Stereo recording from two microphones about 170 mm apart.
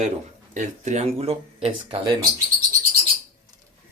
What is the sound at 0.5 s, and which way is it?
Speech, 45° right (ahead or behind).